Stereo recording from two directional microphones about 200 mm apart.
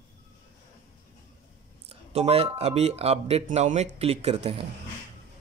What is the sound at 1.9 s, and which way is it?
Speech, 30° right (ahead or behind).